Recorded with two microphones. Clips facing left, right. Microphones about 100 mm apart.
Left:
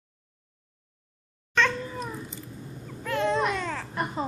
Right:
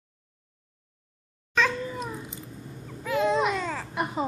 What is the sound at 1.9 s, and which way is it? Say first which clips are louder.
Cat: even; 15° right (ahead or behind).